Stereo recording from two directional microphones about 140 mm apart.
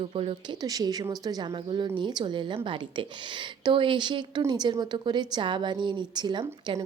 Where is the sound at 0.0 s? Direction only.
40° right (ahead or behind).